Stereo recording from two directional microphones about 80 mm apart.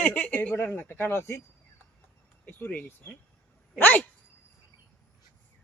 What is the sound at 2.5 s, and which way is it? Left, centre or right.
Speech, left.